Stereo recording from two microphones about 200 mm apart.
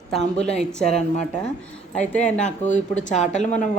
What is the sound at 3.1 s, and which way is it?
Speech, 35° left (ahead or behind).